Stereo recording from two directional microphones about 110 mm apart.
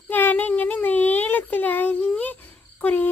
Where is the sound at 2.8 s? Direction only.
15° left (ahead or behind).